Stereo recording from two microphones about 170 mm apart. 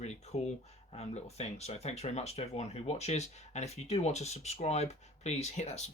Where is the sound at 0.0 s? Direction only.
40° left (ahead or behind).